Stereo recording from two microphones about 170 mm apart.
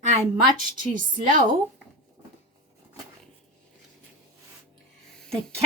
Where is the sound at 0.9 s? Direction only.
50° right (ahead or behind).